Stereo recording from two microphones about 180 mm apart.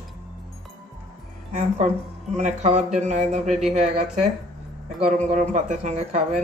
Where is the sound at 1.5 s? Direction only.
40° right (ahead or behind).